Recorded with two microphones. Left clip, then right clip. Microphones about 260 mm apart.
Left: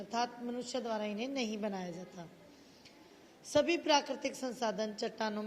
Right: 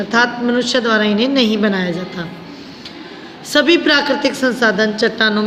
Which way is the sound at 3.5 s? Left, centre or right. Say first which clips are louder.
Right 17 dB; centre.